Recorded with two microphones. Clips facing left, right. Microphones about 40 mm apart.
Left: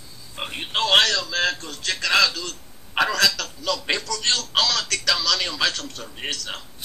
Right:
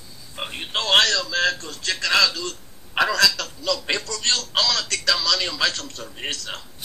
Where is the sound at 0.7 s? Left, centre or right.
Left.